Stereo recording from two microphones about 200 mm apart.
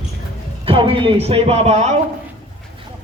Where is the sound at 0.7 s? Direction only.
25° right (ahead or behind).